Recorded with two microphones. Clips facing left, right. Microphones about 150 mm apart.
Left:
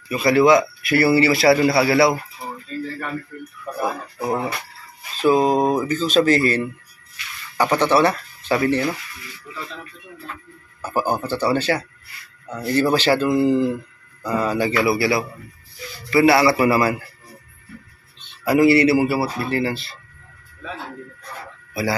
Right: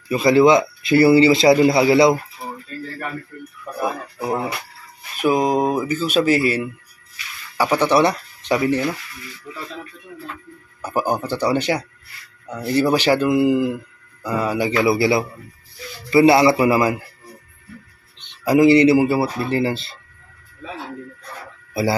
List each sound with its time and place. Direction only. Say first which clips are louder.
0.1 s speech: right 1 dB; 25° right (ahead or behind)
3.8 s speech: even; 10° right (ahead or behind)
10.8 s speech: right 1 dB; 15° right (ahead or behind)
18.2 s speech: right 2 dB; 20° right (ahead or behind)